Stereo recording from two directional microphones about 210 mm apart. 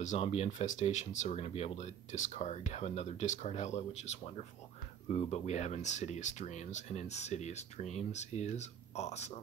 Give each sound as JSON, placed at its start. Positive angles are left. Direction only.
{"t": 0.0, "sound": "speech", "side_deg": 30}